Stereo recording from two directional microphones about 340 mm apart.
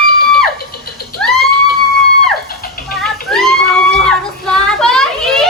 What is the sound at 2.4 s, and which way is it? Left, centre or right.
Music, left.